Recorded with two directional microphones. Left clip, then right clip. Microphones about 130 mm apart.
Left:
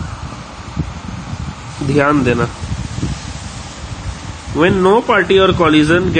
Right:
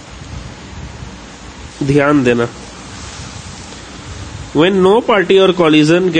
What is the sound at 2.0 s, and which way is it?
Speech, 35° right (ahead or behind).